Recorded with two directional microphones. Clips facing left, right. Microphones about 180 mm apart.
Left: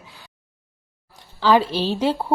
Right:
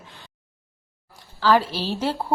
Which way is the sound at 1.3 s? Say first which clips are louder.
Left 2 dB; 20° left (ahead or behind).